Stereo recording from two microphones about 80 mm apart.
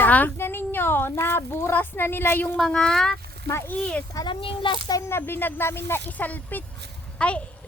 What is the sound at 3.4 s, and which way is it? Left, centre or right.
Speech, left.